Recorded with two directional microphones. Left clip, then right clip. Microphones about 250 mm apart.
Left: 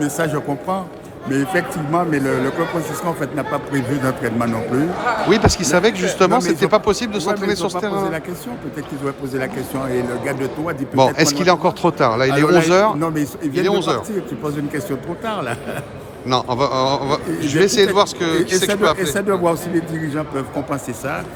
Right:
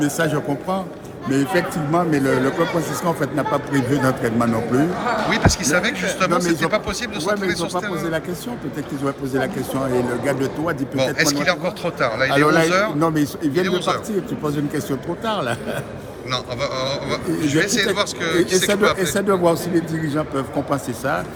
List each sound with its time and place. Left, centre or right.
0.0 s a man's voice: centre
5.3 s speech: centre
10.2 s a man's voice: centre
10.9 s speech: left
13.0 s a man's voice: centre
13.5 s a man's voice: centre
16.3 s a man's voice: centre